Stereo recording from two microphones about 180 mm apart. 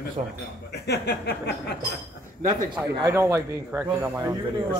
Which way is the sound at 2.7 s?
15° right (ahead or behind).